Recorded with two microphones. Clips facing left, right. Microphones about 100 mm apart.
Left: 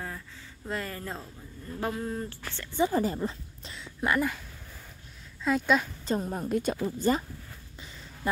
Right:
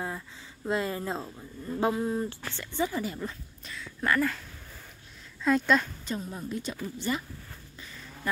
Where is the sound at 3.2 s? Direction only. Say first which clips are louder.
Left 4 dB; 25° left (ahead or behind).